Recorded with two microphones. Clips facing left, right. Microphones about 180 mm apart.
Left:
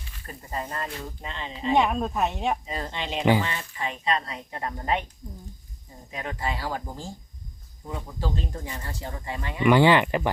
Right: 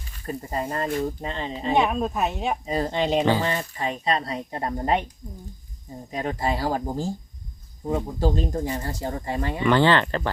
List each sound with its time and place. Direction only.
0.3 s speech: 30° right (ahead or behind)
1.7 s speech: 5° right (ahead or behind)
2.6 s speech: 40° right (ahead or behind)
6.1 s speech: 35° right (ahead or behind)
9.6 s speech: 10° left (ahead or behind)